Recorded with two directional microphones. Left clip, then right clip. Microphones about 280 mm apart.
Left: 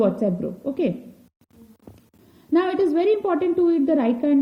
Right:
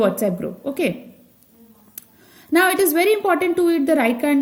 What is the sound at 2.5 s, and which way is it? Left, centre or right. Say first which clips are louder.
A woman's voice: right 4 dB; right.